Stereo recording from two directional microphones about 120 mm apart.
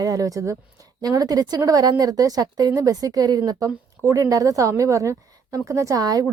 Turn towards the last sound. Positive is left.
turn(degrees=-30)  # may be behind; listen again after turning